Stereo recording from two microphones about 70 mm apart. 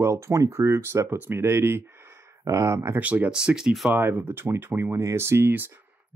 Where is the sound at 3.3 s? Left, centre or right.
Centre.